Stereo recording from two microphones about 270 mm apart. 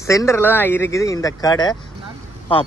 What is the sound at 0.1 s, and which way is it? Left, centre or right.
A man's voice, centre.